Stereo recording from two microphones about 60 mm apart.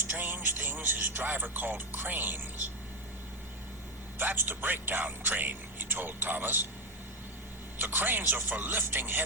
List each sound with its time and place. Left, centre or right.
0.0 s music: right
4.2 s speech: right
7.8 s speech: right